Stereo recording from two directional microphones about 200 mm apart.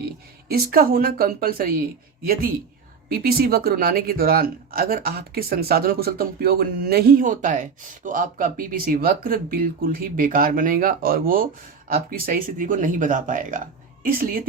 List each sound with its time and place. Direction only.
0.5 s speech: 45° right (ahead or behind)
3.1 s speech: 50° right (ahead or behind)